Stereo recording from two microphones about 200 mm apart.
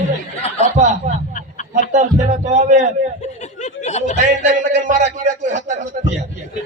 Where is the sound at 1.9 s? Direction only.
35° right (ahead or behind).